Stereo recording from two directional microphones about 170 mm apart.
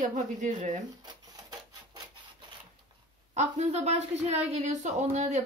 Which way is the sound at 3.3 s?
40° right (ahead or behind).